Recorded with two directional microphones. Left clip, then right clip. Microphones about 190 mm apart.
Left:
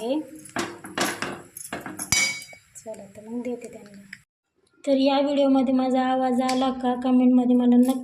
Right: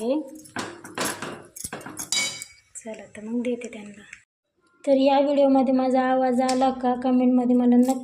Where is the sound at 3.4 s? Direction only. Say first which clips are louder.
Right 3 dB; 5° right (ahead or behind).